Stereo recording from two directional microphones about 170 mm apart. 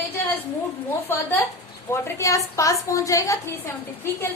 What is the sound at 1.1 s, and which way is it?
A woman's voice, 15° left (ahead or behind).